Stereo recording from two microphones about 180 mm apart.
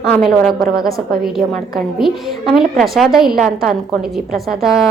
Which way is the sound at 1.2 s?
Centre (ahead or behind).